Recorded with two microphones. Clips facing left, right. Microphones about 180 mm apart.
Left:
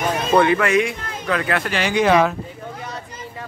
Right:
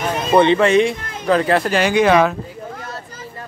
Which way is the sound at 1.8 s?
50° right (ahead or behind).